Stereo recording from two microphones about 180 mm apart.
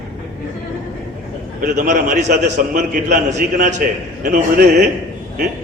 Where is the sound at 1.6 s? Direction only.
45° right (ahead or behind).